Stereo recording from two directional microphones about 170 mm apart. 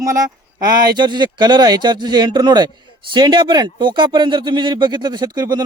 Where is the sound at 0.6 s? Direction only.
25° right (ahead or behind).